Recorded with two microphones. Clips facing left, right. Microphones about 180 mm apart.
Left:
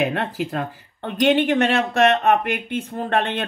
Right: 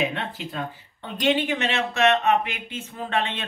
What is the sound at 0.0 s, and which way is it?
Speech, 65° left (ahead or behind).